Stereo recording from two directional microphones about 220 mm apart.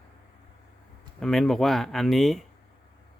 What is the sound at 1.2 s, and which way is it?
Speech, centre (ahead or behind).